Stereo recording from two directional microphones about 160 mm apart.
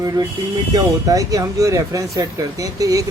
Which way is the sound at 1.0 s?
20° right (ahead or behind).